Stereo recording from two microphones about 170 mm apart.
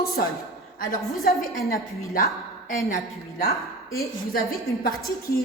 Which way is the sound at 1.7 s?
60° left (ahead or behind).